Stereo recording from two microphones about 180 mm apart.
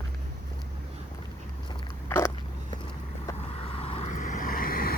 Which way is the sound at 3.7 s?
30° left (ahead or behind).